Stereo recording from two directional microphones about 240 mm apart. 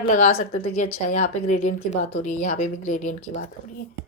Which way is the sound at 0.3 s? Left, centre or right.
Left.